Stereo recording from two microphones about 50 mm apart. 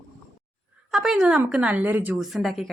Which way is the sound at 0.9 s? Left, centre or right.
Centre.